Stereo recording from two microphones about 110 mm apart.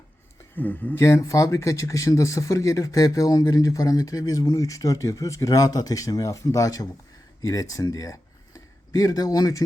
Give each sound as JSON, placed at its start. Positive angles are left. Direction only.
{"t": 0.5, "sound": "speech", "side_deg": 15}